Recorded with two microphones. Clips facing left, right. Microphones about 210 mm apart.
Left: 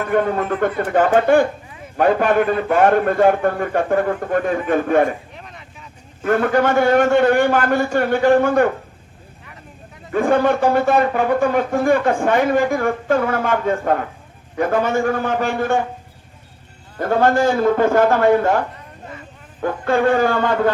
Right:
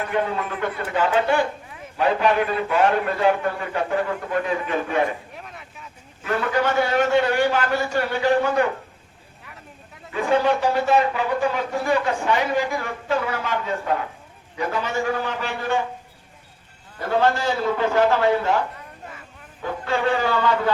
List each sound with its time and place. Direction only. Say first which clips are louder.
0.0 s speech: left 6 dB; 50° left (ahead or behind)
5.4 s vehicle: left 1 dB; 5° right (ahead or behind)
6.2 s speech: left 6 dB; 50° left (ahead or behind)
10.1 s speech: left 4 dB; 50° left (ahead or behind)
17.0 s speech: left 5 dB; 50° left (ahead or behind)
19.6 s speech: left 6 dB; 50° left (ahead or behind)